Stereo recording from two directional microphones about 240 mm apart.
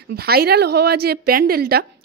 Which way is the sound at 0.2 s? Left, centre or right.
Right.